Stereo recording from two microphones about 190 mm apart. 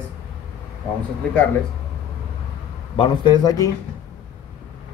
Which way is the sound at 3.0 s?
25° left (ahead or behind).